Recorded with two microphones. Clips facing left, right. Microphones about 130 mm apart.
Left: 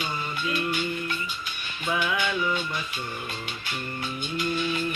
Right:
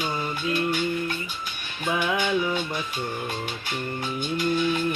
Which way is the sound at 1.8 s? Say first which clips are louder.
Right 2 dB; 40° right (ahead or behind).